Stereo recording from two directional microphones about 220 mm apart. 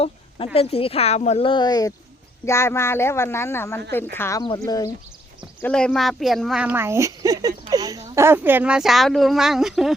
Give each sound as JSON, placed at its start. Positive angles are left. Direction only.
{"t": 0.0, "sound": "speech", "side_deg": 25}
{"t": 5.6, "sound": "speech", "side_deg": 5}